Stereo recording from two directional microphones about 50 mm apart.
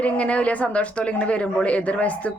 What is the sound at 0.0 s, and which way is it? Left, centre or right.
A woman's voice, left.